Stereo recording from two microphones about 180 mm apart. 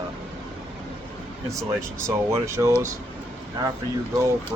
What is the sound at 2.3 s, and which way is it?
Speech, 15° right (ahead or behind).